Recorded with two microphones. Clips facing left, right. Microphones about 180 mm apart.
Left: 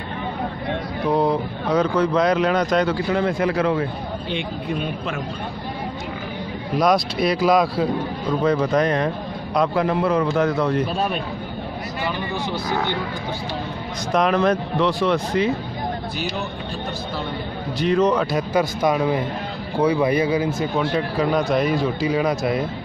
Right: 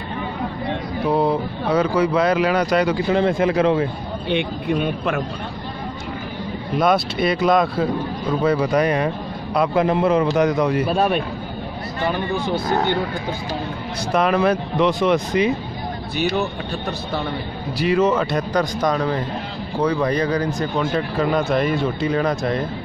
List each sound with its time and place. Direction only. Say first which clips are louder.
1.1 s speech: even; 5° right (ahead or behind)
3.1 s speech: right 3 dB; 25° right (ahead or behind)
4.3 s speech: right 6 dB; 60° right (ahead or behind)
6.7 s speech: even; centre (ahead or behind)
9.8 s speech: right 5 dB; 20° right (ahead or behind)
10.9 s speech: right 5 dB; 55° right (ahead or behind)
14.1 s speech: right 1 dB; 5° right (ahead or behind)
14.9 s speech: right 3 dB; 20° right (ahead or behind)
16.2 s speech: right 10 dB; 65° right (ahead or behind)
17.7 s speech: right 1 dB; 5° right (ahead or behind)